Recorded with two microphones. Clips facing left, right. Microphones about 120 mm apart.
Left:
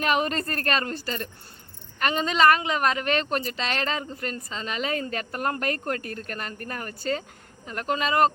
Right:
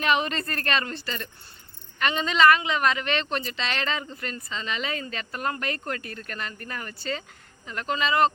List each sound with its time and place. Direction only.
0.0 s speech: 45° left (ahead or behind)